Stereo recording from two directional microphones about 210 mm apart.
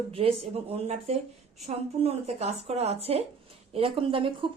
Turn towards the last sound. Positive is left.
turn(degrees=-25)  # may be behind; listen again after turning